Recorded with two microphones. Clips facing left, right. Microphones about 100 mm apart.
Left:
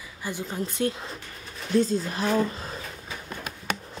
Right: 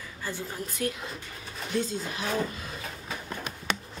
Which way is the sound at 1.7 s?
40° left (ahead or behind).